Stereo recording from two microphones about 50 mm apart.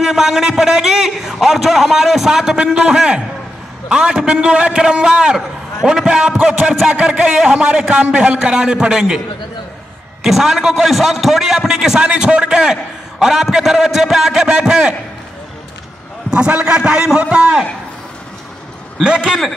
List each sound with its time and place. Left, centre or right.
0.0 s a man's voice: centre
10.2 s a man's voice: centre
16.3 s a man's voice: right
18.9 s a man's voice: centre